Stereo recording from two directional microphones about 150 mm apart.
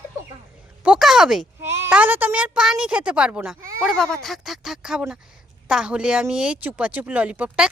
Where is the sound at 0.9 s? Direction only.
Centre (ahead or behind).